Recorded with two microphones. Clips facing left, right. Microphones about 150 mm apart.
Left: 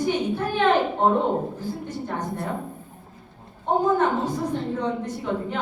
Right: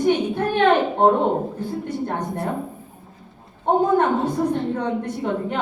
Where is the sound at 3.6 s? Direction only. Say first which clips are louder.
Right 3 dB; 60° right (ahead or behind).